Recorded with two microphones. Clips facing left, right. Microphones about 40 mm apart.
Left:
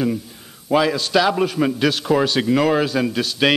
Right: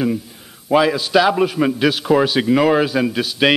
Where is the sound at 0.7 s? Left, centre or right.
Centre.